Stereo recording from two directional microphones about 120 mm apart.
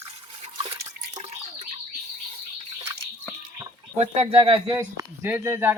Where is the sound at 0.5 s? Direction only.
60° right (ahead or behind).